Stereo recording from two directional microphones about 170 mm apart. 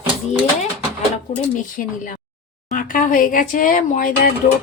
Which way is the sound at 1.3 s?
50° left (ahead or behind).